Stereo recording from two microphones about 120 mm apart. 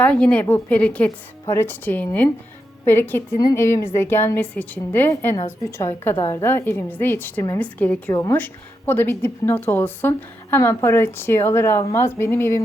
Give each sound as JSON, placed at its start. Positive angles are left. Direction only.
{"t": 0.0, "sound": "a woman's voice", "side_deg": 10}